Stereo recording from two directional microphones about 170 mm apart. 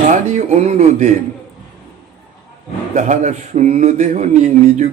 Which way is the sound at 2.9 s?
45° right (ahead or behind).